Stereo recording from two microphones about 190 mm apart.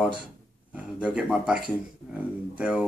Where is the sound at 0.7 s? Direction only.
5° right (ahead or behind).